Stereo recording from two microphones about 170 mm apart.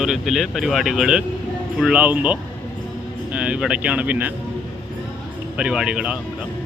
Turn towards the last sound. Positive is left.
turn(degrees=-5)  # may be behind; listen again after turning